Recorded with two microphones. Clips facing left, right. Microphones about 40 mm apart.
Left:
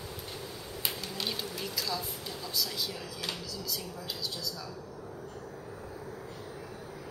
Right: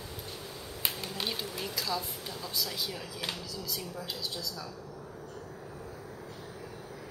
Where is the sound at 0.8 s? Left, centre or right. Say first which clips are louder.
Right 1 dB; centre.